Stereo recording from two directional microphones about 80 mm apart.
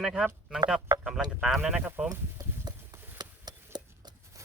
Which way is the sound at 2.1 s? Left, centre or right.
Right.